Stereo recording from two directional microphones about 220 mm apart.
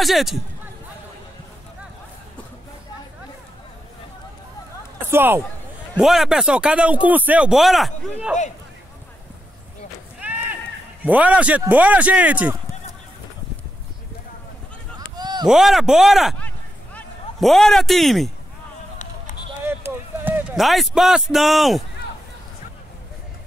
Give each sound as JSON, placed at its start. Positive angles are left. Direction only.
{"t": 0.0, "sound": "speech", "side_deg": 0}
{"t": 5.1, "sound": "speech", "side_deg": -10}
{"t": 10.2, "sound": "run", "side_deg": -10}
{"t": 11.1, "sound": "speech", "side_deg": -5}
{"t": 15.0, "sound": "a sound", "side_deg": -20}
{"t": 15.4, "sound": "speech", "side_deg": 0}
{"t": 19.6, "sound": "a sound", "side_deg": -10}